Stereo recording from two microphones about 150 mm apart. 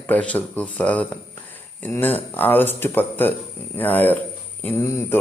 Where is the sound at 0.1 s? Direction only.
10° left (ahead or behind).